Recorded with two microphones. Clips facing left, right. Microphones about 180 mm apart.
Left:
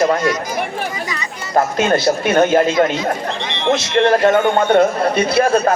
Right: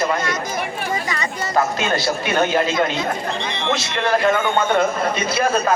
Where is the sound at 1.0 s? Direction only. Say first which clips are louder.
Right 2 dB; 50° right (ahead or behind).